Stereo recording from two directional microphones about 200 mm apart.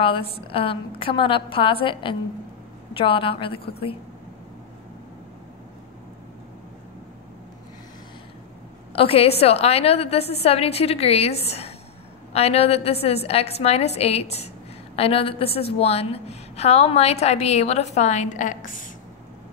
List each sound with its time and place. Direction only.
0.0 s a woman's voice: 25° left (ahead or behind)
8.9 s a woman's voice: 30° left (ahead or behind)